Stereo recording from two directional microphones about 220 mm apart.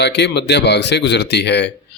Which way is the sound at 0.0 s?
50° left (ahead or behind).